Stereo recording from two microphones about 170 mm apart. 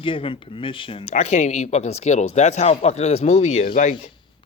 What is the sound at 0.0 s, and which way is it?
Speech, 30° left (ahead or behind).